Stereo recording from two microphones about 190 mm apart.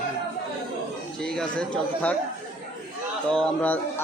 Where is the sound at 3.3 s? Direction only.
5° left (ahead or behind).